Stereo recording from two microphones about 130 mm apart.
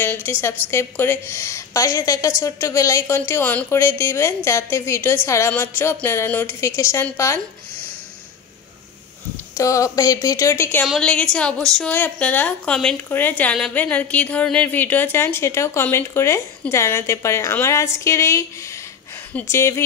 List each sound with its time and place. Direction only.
0.0 s a woman's voice: 15° left (ahead or behind)
9.6 s a woman's voice: 25° left (ahead or behind)
11.0 s a woman's voice: 5° left (ahead or behind)
19.4 s a woman's voice: 20° left (ahead or behind)